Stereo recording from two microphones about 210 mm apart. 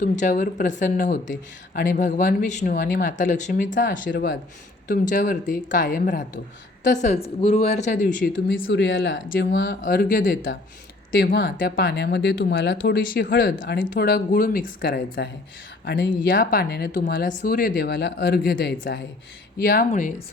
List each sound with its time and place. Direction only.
0.0 s speech: 35° left (ahead or behind)
8.5 s speech: 60° left (ahead or behind); by 10.5 s 40° left (ahead or behind)
11.2 s speech: 50° left (ahead or behind)
16.3 s speech: 45° left (ahead or behind)